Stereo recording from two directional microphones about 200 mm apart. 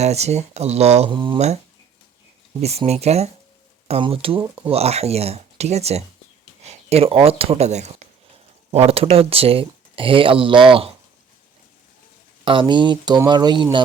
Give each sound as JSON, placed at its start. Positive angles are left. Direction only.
{"t": 0.0, "sound": "speech", "side_deg": -35}
{"t": 2.6, "sound": "speech", "side_deg": -30}
{"t": 12.5, "sound": "speech", "side_deg": -25}